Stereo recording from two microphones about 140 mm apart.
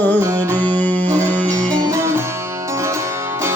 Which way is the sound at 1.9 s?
20° right (ahead or behind).